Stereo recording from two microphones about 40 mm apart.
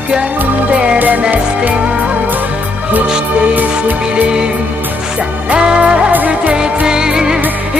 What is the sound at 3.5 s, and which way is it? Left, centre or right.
Music, right.